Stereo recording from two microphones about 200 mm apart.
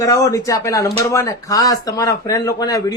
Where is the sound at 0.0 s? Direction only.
15° left (ahead or behind).